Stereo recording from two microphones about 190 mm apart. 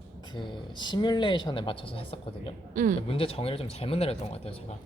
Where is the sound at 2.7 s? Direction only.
45° right (ahead or behind).